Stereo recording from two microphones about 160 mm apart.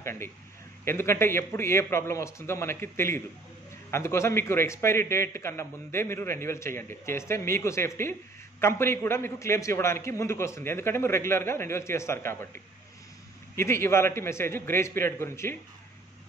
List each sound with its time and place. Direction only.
0.0 s a man's voice: 15° left (ahead or behind)
13.6 s a man's voice: 15° left (ahead or behind)